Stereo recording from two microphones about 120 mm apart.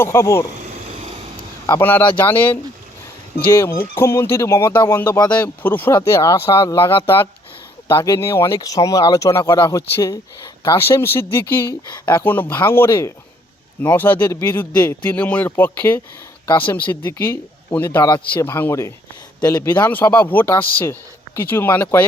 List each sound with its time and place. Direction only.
0.0 s speech: 20° left (ahead or behind)
1.8 s speech: 15° left (ahead or behind)
7.9 s speech: 35° left (ahead or behind); by 16.0 s 15° left (ahead or behind)
16.5 s speech: 45° left (ahead or behind)
17.1 s speech: 15° left (ahead or behind)
18.0 s speech: 25° left (ahead or behind)
19.4 s speech: 35° left (ahead or behind)
19.6 s speech: 15° left (ahead or behind)